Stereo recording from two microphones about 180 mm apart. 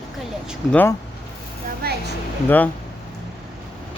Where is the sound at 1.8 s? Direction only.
60° right (ahead or behind).